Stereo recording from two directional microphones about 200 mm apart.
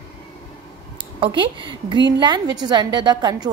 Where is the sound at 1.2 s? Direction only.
25° right (ahead or behind).